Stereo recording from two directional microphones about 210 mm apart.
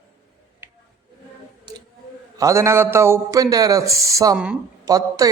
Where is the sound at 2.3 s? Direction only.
15° right (ahead or behind).